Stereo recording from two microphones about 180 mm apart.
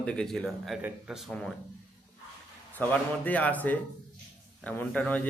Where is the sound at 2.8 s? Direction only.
10° left (ahead or behind).